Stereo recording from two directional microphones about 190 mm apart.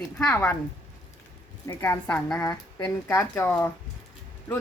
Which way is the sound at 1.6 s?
15° left (ahead or behind).